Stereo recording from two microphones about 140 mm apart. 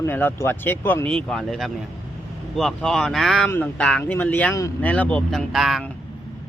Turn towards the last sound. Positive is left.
turn(degrees=0)  # may be behind; listen again after turning